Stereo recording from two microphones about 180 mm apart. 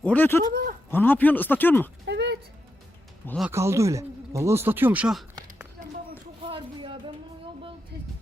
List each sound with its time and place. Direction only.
0.0 s speech: 10° left (ahead or behind)
0.5 s speech: 50° right (ahead or behind)
0.9 s speech: 10° left (ahead or behind)
2.0 s a sound: 70° right (ahead or behind)
3.5 s speech: 15° right (ahead or behind)
6.4 s a sound: 30° right (ahead or behind)